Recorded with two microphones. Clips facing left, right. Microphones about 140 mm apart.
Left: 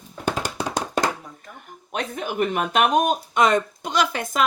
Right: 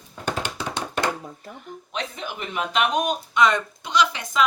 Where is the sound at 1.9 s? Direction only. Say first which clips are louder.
Left 7 dB; 50° left (ahead or behind).